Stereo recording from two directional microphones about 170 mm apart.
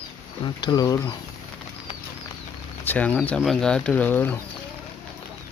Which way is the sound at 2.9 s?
10° left (ahead or behind).